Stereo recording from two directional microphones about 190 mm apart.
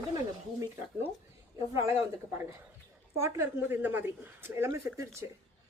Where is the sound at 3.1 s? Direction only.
15° right (ahead or behind).